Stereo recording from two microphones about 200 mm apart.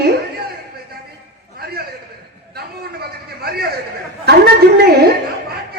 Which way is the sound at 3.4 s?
50° right (ahead or behind).